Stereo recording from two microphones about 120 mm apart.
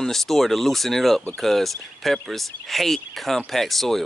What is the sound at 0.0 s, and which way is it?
Speech, centre (ahead or behind).